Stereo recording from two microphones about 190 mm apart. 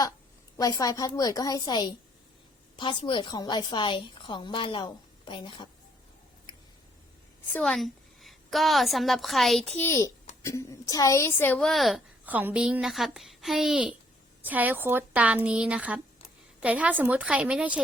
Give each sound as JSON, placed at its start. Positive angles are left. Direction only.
{"t": 0.5, "sound": "a woman's voice", "side_deg": 20}
{"t": 7.5, "sound": "a woman's voice", "side_deg": 5}